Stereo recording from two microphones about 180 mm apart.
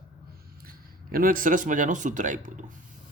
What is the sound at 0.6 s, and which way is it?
Speech, 55° right (ahead or behind).